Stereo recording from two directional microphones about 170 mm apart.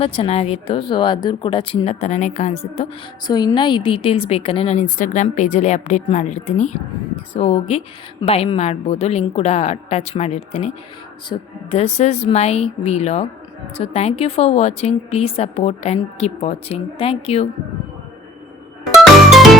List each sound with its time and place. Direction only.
0.0 s a woman's voice: 35° left (ahead or behind)
3.2 s a woman's voice: 25° left (ahead or behind)